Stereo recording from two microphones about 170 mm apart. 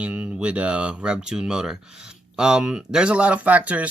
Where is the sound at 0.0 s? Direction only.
10° right (ahead or behind).